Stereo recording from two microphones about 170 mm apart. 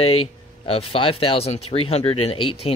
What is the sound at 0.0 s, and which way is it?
Speech, 35° left (ahead or behind).